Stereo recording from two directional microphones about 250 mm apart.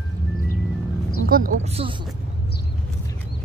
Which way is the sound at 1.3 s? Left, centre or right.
Right.